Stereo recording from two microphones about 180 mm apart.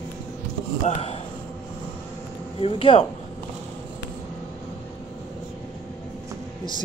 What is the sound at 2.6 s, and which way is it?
Speech, 30° left (ahead or behind).